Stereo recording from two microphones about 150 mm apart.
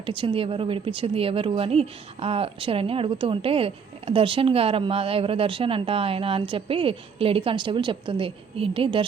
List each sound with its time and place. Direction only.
0.0 s speech: 35° right (ahead or behind)